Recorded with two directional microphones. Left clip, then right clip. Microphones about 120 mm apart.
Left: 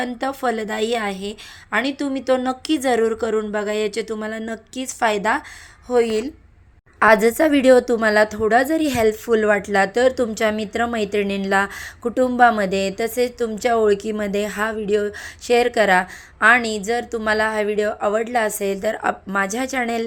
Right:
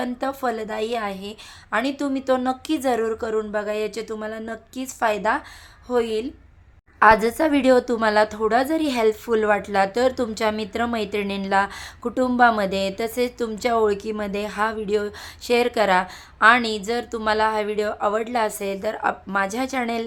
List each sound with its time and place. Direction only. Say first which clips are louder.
0.0 s a woman's voice: left 2 dB; 15° left (ahead or behind)